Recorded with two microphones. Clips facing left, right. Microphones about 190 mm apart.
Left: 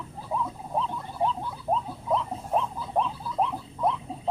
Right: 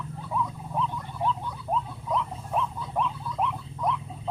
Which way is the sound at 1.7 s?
35° left (ahead or behind).